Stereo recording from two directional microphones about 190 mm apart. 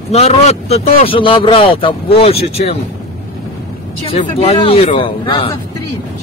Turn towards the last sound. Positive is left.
turn(degrees=25)  # may be behind; listen again after turning